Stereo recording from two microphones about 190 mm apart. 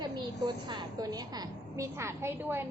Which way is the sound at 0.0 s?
25° right (ahead or behind).